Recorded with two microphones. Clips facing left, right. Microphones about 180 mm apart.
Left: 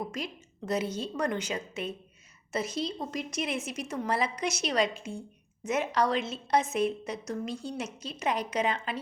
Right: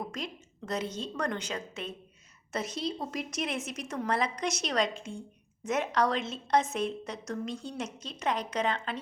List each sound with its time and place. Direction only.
0.0 s a woman's voice: 5° left (ahead or behind)